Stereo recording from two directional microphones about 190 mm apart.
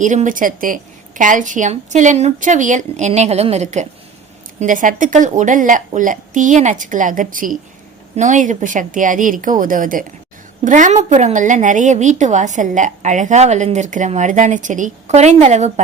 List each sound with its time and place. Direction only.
0.0 s a woman's voice: 40° right (ahead or behind)